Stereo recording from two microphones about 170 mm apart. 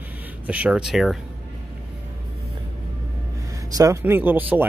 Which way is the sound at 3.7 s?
15° right (ahead or behind).